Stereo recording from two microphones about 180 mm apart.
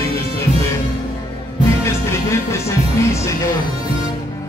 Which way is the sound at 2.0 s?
15° left (ahead or behind).